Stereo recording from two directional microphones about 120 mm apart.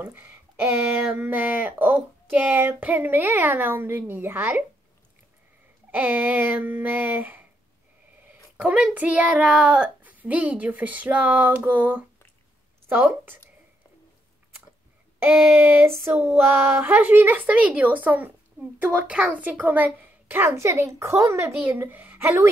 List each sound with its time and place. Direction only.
0.0 s speech: 15° right (ahead or behind)
5.9 s speech: 15° right (ahead or behind)
8.5 s a woman's voice: 10° right (ahead or behind)
15.2 s speech: 20° right (ahead or behind)